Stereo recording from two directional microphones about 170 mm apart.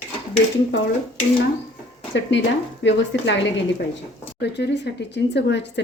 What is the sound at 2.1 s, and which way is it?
A woman's voice, 90° left.